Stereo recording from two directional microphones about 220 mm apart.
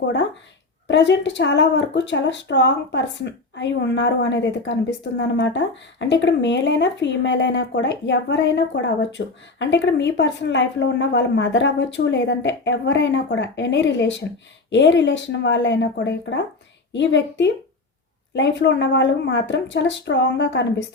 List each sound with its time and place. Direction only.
0.9 s speech: 55° left (ahead or behind)